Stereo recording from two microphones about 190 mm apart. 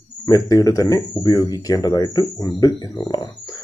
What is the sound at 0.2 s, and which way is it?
Speech, 20° left (ahead or behind).